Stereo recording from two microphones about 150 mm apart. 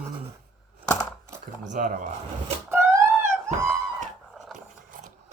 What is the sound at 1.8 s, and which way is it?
Speech, 65° right (ahead or behind).